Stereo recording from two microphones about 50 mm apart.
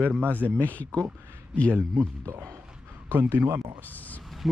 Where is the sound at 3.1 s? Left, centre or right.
Right.